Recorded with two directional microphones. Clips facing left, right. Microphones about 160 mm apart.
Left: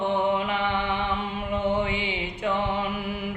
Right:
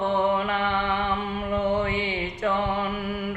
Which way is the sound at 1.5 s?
15° left (ahead or behind).